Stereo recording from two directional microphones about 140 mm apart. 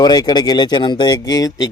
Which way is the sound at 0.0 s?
30° left (ahead or behind).